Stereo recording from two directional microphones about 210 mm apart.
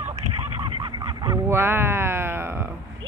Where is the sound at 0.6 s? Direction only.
20° right (ahead or behind).